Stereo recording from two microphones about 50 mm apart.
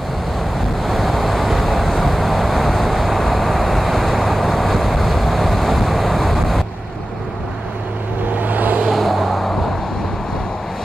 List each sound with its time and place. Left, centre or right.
0.8 s vehicle: centre
8.4 s vehicle: right
8.9 s vehicle: centre